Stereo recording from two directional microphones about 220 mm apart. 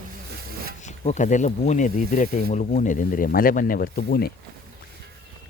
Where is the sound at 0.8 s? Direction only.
30° left (ahead or behind).